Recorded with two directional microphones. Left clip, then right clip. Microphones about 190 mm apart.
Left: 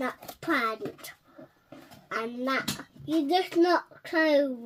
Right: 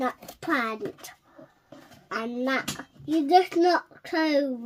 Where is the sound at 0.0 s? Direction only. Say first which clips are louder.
Right 3 dB; 30° right (ahead or behind).